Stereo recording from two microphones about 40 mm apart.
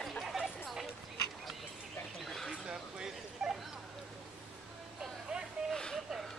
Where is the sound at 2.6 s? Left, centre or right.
Centre.